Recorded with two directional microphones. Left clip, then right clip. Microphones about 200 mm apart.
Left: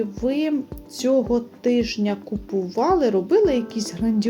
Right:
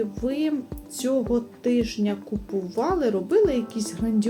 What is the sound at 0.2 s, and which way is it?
A woman's voice, 30° left (ahead or behind).